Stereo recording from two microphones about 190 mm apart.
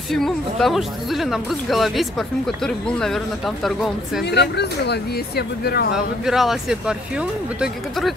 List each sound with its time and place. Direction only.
0.1 s speech: centre (ahead or behind)
4.2 s speech: 60° left (ahead or behind)
5.9 s speech: centre (ahead or behind)